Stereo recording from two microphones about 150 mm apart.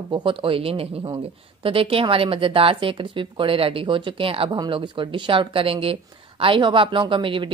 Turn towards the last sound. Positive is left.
turn(degrees=-35)  # may be behind; listen again after turning